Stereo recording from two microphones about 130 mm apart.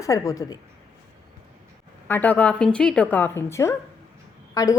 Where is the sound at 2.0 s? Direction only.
15° left (ahead or behind).